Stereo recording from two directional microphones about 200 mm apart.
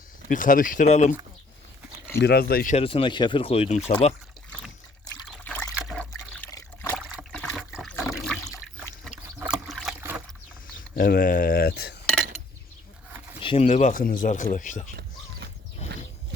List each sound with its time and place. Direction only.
0.3 s speech: 40° left (ahead or behind)
2.1 s speech: 55° left (ahead or behind)
2.7 s speech: 25° left (ahead or behind)
5.7 s water: centre (ahead or behind)
6.5 s trickle: 15° left (ahead or behind)
7.3 s trickle: 5° right (ahead or behind)
7.9 s water: 5° left (ahead or behind)
9.5 s boat: centre (ahead or behind)
10.8 s speech: 45° left (ahead or behind)
13.4 s speech: 30° left (ahead or behind)